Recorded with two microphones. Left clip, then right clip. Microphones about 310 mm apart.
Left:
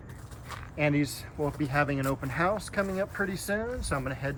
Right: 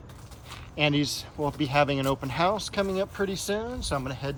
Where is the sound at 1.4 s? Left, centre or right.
Centre.